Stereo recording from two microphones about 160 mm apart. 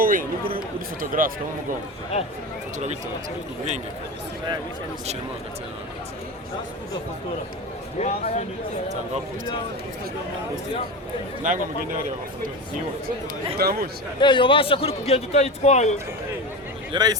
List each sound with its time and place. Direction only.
0.0 s a man's voice: 60° right (ahead or behind)
7.9 s speech: 40° left (ahead or behind)
11.4 s a man's voice: 55° right (ahead or behind)
13.6 s speech: 75° right (ahead or behind)
14.2 s a man's voice: 30° left (ahead or behind)
16.9 s speech: 25° right (ahead or behind)